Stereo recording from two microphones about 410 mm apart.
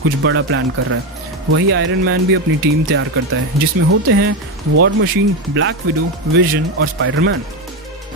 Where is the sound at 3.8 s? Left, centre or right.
Right.